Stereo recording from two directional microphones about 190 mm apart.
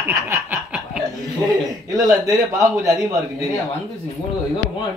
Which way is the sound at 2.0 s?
15° right (ahead or behind).